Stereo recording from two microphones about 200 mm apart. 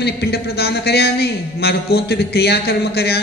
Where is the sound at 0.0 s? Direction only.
55° left (ahead or behind).